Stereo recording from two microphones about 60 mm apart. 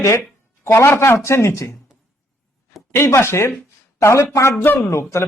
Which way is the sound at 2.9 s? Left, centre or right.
Left.